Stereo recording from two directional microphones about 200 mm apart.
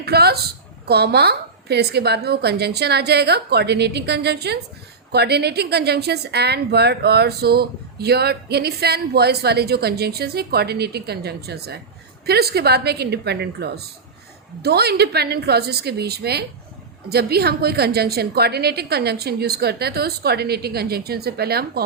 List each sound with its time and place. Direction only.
0.0 s a woman's voice: 50° right (ahead or behind)